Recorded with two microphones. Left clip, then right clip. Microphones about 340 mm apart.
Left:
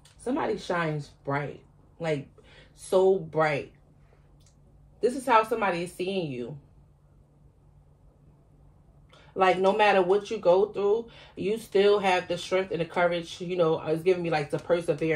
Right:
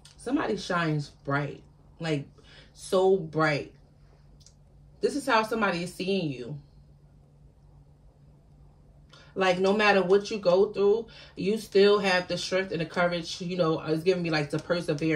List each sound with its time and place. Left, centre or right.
0.2 s speech: left
2.9 s speech: left
5.1 s speech: centre
9.4 s speech: centre